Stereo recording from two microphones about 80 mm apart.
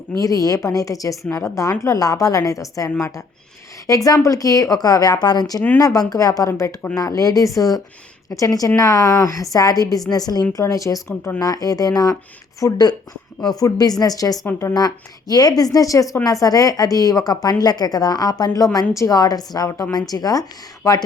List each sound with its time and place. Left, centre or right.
0.2 s a woman's voice: left
1.2 s a woman's voice: left
1.8 s a woman's voice: left